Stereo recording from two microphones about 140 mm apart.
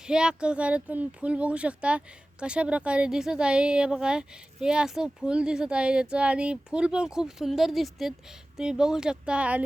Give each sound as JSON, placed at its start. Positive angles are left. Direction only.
{"t": 0.1, "sound": "speech", "side_deg": -5}